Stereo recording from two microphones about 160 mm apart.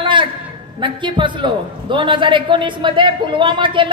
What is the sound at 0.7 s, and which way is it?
A woman's voice, 30° right (ahead or behind).